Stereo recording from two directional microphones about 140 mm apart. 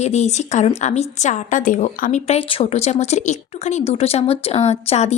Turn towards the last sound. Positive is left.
turn(degrees=50)  # may be behind; listen again after turning